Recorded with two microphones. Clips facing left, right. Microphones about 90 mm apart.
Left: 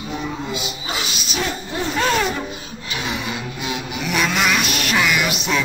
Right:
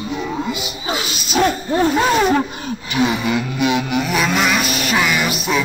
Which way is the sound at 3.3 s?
65° right (ahead or behind).